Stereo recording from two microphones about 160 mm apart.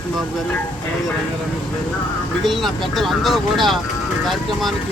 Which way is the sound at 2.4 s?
Centre (ahead or behind).